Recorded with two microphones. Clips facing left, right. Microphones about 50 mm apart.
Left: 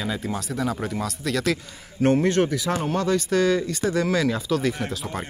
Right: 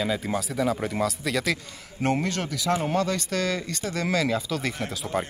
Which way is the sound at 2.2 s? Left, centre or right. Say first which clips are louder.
Left 8 dB; left.